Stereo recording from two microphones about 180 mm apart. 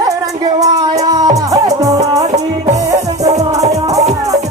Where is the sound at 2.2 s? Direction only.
40° right (ahead or behind).